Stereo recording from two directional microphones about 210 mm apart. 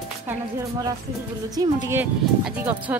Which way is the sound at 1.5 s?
15° right (ahead or behind).